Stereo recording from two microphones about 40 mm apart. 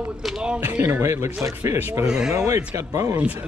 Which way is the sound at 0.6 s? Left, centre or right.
Right.